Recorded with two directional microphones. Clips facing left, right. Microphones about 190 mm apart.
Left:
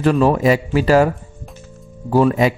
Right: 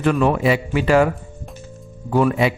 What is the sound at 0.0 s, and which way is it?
Speech, 35° left (ahead or behind).